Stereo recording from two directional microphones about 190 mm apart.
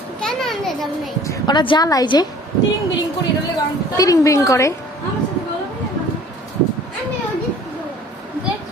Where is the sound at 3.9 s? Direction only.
20° left (ahead or behind).